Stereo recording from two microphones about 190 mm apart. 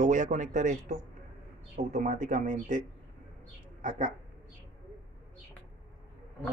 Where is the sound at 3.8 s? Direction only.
40° right (ahead or behind).